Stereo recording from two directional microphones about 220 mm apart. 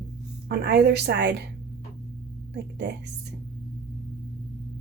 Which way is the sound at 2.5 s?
50° right (ahead or behind).